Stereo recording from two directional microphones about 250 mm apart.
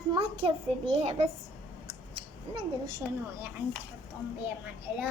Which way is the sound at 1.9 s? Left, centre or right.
Centre.